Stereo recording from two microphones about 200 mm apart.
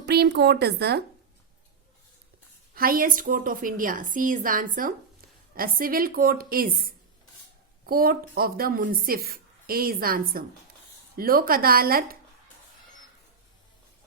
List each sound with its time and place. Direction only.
0.0 s a woman's voice: 55° right (ahead or behind)
2.7 s speech: 45° right (ahead or behind)